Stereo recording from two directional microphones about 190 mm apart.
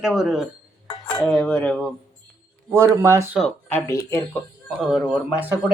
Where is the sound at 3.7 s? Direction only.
15° left (ahead or behind).